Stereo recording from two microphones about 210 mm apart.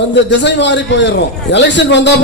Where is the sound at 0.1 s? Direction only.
55° left (ahead or behind).